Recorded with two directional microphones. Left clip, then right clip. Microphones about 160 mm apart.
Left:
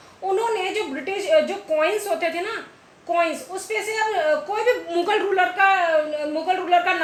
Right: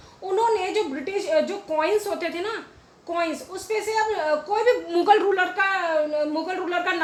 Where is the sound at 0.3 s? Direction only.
65° right (ahead or behind).